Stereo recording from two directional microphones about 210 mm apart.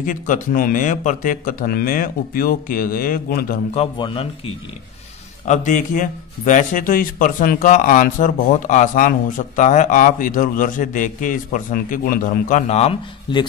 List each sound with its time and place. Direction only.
0.0 s a man's voice: 40° left (ahead or behind)
3.7 s speech: 25° left (ahead or behind)
5.4 s a man's voice: 35° left (ahead or behind)